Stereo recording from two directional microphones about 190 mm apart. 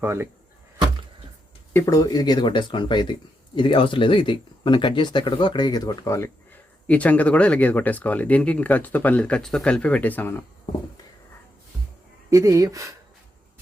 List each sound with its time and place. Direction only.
0.0 s speech: 15° right (ahead or behind)
1.7 s speech: 15° left (ahead or behind)
12.3 s speech: 15° right (ahead or behind)